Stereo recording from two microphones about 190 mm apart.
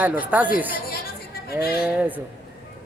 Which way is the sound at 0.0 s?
10° right (ahead or behind).